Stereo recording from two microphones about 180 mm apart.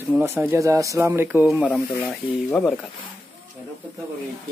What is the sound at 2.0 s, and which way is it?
Speech, 5° left (ahead or behind).